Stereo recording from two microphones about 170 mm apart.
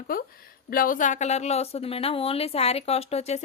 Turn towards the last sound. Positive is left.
turn(degrees=40)  # may be behind; listen again after turning